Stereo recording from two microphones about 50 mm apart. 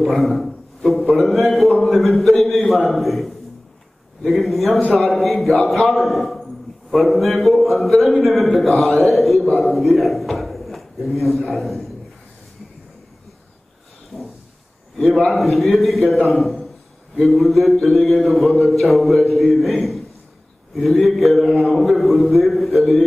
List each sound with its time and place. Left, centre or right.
0.0 s a man's voice: centre
1.5 s a sound: centre
2.8 s a man's voice: centre
4.6 s a man's voice: left
4.9 s a man's voice: centre
14.1 s a sound: centre
15.3 s a man's voice: centre